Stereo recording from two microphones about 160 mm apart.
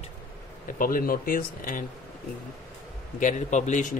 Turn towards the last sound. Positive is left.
turn(degrees=50)  # may be behind; listen again after turning